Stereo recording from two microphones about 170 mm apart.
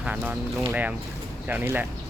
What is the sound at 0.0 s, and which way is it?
Speech, 10° right (ahead or behind).